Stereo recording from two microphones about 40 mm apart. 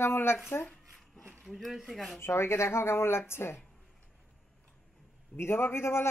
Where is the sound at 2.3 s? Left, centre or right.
Left.